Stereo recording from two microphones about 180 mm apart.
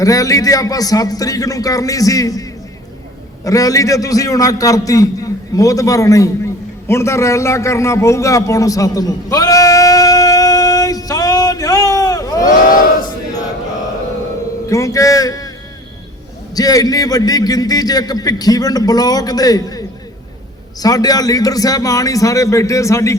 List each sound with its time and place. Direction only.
0.0 s a man's voice: 20° left (ahead or behind)
3.4 s a sound: 20° left (ahead or behind)
14.7 s a man's voice: 20° left (ahead or behind)
16.6 s a man's voice: 20° left (ahead or behind)